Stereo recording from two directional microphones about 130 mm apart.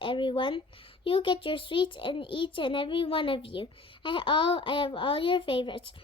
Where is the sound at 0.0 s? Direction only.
40° left (ahead or behind).